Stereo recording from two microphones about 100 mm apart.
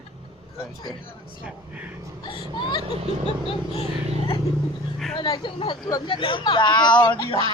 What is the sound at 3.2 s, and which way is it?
Vehicle, 80° left.